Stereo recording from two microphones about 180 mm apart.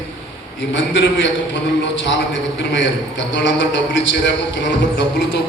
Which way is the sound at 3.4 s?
90° left.